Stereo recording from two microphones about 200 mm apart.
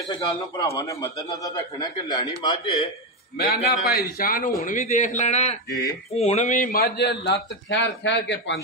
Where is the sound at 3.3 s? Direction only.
50° left (ahead or behind).